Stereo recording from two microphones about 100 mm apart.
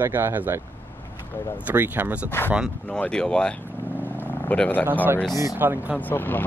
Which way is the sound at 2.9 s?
10° left (ahead or behind).